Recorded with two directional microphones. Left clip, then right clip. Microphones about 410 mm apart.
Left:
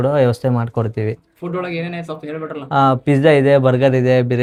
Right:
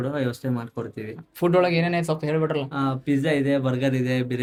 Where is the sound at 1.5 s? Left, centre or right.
Right.